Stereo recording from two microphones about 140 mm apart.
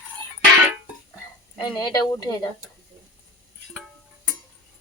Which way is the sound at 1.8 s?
25° left (ahead or behind).